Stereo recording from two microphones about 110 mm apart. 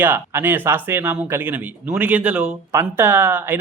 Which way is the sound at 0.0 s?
20° right (ahead or behind).